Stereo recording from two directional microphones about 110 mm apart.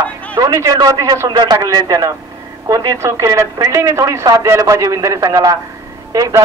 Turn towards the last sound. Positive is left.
turn(degrees=-30)  # may be behind; listen again after turning